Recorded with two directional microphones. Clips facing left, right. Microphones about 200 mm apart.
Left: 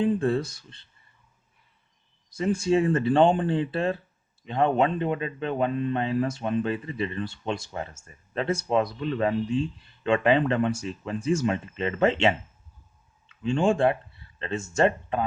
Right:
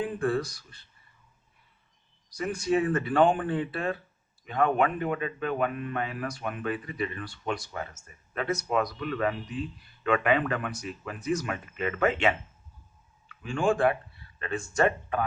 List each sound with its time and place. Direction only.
0.0 s speech: 25° left (ahead or behind)
2.3 s speech: 25° left (ahead or behind)